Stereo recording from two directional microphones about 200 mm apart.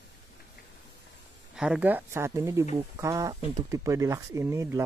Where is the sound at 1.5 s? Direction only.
5° right (ahead or behind).